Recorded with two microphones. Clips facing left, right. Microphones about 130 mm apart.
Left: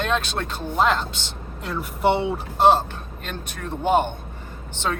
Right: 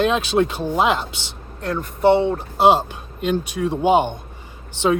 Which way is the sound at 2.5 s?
10° right (ahead or behind).